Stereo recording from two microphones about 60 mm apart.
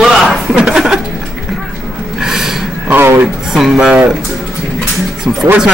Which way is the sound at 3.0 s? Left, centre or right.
Right.